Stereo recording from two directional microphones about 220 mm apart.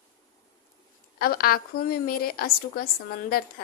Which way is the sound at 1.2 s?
45° left (ahead or behind).